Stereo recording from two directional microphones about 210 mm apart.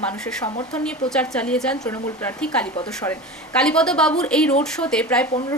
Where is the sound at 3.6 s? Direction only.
5° left (ahead or behind).